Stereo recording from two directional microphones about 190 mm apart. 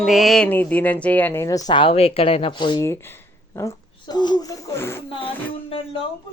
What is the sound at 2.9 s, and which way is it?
Speech, 10° left (ahead or behind).